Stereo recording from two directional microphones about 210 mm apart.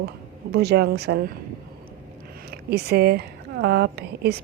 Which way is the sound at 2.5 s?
50° right (ahead or behind).